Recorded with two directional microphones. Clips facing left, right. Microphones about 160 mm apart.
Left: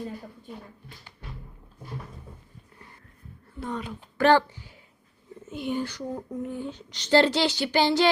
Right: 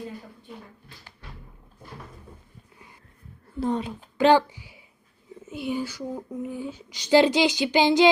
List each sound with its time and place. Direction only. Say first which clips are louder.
3.6 s a woman's voice: right 7 dB; 30° right (ahead or behind)
4.2 s speech: right 2 dB; 15° right (ahead or behind)